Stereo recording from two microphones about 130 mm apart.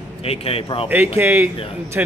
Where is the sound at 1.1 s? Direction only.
20° right (ahead or behind).